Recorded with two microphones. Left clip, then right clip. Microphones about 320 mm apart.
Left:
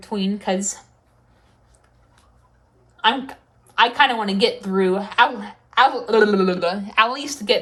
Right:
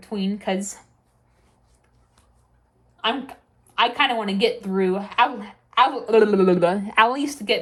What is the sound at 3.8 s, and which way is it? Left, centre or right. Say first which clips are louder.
A woman's voice: left 4 dB; centre.